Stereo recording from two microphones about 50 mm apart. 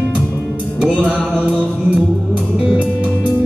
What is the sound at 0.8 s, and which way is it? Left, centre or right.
Music, centre.